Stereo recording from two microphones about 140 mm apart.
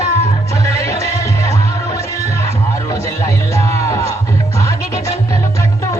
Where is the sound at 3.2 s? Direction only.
20° left (ahead or behind).